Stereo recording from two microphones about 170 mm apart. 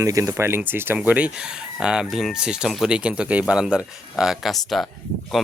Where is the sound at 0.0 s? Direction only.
20° right (ahead or behind).